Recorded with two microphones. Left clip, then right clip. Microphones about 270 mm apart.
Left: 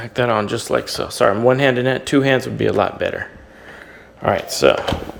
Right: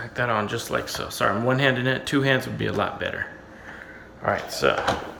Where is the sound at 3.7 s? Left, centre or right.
Left.